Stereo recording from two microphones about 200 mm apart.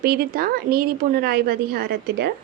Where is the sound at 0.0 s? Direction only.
50° right (ahead or behind).